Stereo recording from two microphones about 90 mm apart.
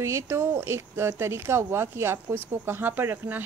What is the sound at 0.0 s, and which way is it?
Speech, 30° right (ahead or behind).